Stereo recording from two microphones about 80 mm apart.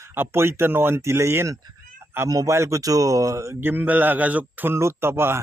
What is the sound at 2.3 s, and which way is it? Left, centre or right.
A man's voice, right.